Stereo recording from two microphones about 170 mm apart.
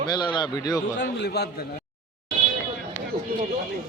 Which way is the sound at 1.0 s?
85° left.